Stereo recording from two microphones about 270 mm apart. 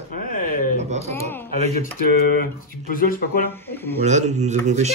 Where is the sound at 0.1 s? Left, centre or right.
Left.